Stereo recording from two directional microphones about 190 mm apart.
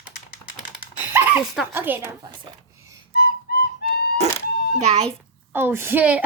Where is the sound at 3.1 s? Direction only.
55° left (ahead or behind).